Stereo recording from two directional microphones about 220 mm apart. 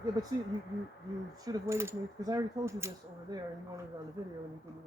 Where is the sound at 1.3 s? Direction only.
15° right (ahead or behind).